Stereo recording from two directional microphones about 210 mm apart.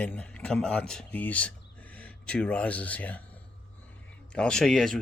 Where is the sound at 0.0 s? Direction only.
5° left (ahead or behind).